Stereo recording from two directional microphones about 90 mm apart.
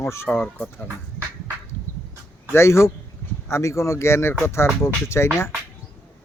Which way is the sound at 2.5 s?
30° left (ahead or behind).